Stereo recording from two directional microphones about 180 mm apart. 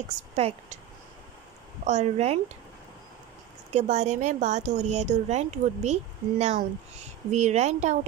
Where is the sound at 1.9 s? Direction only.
40° right (ahead or behind).